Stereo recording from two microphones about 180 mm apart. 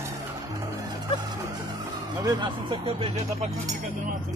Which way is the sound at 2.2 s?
25° right (ahead or behind).